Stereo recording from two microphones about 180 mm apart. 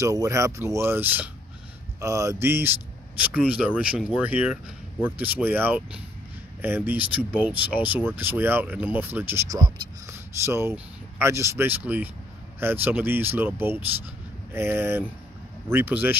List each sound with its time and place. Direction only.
0.0 s speech: 15° right (ahead or behind)
2.0 s a sound: 15° right (ahead or behind)
2.4 s speech: 10° right (ahead or behind)